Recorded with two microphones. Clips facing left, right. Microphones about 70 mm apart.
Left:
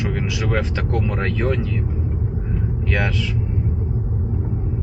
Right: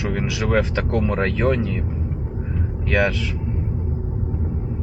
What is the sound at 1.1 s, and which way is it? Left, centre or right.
Speech, centre.